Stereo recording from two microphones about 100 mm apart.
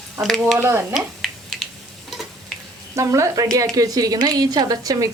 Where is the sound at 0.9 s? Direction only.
Centre (ahead or behind).